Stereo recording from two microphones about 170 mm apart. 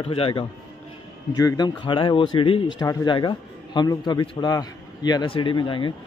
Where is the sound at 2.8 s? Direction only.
20° left (ahead or behind).